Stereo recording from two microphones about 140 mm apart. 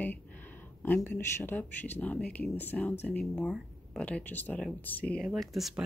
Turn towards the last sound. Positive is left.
turn(degrees=0)  # may be behind; listen again after turning